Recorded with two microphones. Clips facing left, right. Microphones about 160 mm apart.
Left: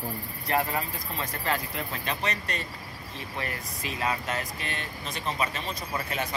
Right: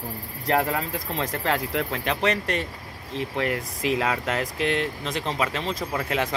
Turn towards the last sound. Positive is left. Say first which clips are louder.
# right 6 dB
turn(degrees=-90)